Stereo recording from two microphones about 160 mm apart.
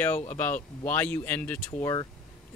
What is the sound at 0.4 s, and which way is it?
Speech, 10° left (ahead or behind).